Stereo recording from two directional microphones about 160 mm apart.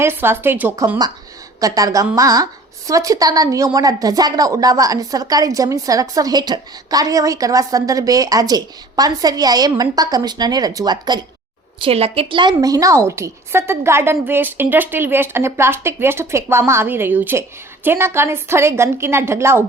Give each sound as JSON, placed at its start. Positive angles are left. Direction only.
{"t": 0.0, "sound": "a woman's voice", "side_deg": -15}
{"t": 1.6, "sound": "a woman's voice", "side_deg": -20}
{"t": 11.8, "sound": "a woman's voice", "side_deg": -35}